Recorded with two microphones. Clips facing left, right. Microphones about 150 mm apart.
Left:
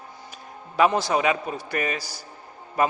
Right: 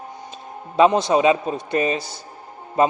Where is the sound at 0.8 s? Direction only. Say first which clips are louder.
Right 5 dB; 20° right (ahead or behind).